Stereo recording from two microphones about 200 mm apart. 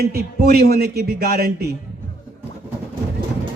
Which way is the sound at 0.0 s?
50° right (ahead or behind).